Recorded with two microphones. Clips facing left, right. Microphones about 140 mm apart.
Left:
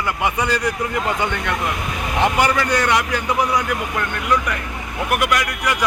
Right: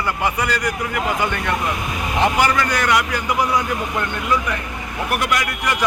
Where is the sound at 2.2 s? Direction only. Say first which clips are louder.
Even; 20° left (ahead or behind).